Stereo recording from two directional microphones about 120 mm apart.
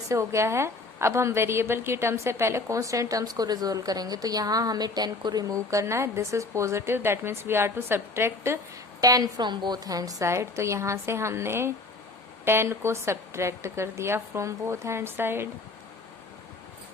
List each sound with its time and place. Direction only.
0.1 s a woman's voice: 25° right (ahead or behind)
9.0 s a woman's voice: 30° right (ahead or behind)